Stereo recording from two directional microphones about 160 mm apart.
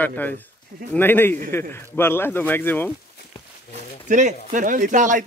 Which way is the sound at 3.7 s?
50° right (ahead or behind).